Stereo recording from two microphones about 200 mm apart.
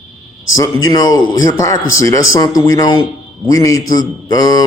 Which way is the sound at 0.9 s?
20° left (ahead or behind).